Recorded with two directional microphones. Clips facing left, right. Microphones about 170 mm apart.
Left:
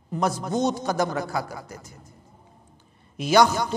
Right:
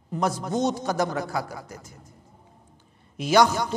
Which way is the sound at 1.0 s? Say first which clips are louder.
Left 1 dB; 20° left (ahead or behind).